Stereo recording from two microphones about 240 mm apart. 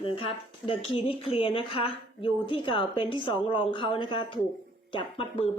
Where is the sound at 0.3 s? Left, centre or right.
Left.